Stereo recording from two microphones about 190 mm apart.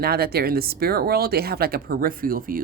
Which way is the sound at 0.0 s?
55° right (ahead or behind).